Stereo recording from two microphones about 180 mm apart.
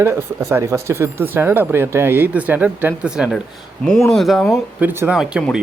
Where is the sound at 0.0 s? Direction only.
15° right (ahead or behind).